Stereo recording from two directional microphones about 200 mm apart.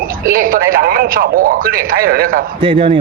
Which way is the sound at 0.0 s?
45° right (ahead or behind).